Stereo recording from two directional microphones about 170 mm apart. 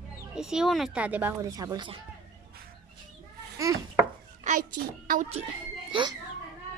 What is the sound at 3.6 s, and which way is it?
Speech, 20° right (ahead or behind).